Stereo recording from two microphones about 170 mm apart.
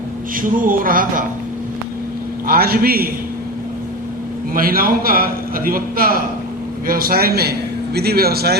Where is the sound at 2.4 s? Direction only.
60° right (ahead or behind).